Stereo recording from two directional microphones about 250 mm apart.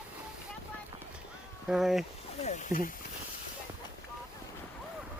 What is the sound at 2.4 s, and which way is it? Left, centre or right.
Speech, left.